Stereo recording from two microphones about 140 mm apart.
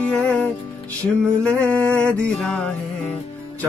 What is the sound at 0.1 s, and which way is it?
Music, 10° left (ahead or behind).